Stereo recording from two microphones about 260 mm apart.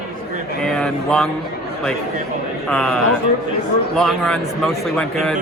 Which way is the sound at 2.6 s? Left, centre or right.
Centre.